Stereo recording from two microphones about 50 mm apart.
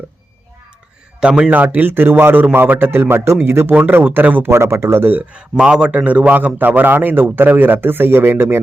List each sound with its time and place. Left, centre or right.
1.2 s a man's voice: right
1.5 s a man's voice: right
3.8 s a man's voice: right
4.4 s speech: right
5.4 s a man's voice: centre; by 8.6 s right